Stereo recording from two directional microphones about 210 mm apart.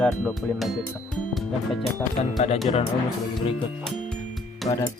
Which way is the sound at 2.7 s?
30° left (ahead or behind).